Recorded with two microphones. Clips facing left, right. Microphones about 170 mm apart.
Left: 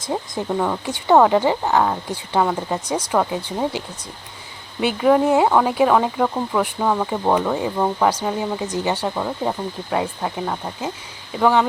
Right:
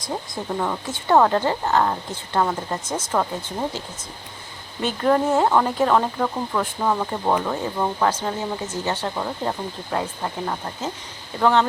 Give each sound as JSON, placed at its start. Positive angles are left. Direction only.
{"t": 0.6, "sound": "speech", "side_deg": 10}
{"t": 4.8, "sound": "speech", "side_deg": 10}